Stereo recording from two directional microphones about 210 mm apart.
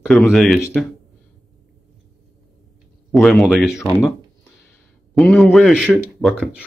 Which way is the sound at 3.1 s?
Centre (ahead or behind).